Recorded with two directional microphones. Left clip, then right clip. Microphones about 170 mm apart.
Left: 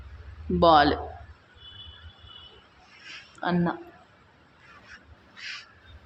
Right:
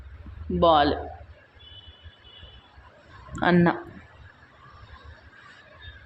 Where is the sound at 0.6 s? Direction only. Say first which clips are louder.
Left 1 dB; 15° left (ahead or behind).